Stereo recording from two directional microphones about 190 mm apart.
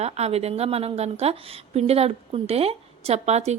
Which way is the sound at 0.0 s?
35° right (ahead or behind).